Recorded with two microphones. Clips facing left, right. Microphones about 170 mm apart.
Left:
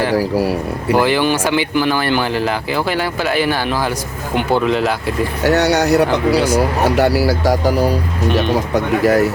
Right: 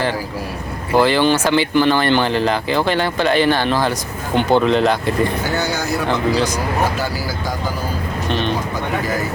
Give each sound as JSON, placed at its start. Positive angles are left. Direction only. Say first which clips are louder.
{"t": 0.9, "sound": "speech", "louder": "right 1 dB", "side_deg": 15}
{"t": 5.4, "sound": "speech", "louder": "left 7 dB", "side_deg": 75}
{"t": 6.3, "sound": "speech", "louder": "left 4 dB", "side_deg": 10}
{"t": 6.8, "sound": "speech", "louder": "left 8 dB", "side_deg": 70}
{"t": 8.3, "sound": "speech", "louder": "left 4 dB", "side_deg": 10}
{"t": 8.7, "sound": "speech", "louder": "left 8 dB", "side_deg": 75}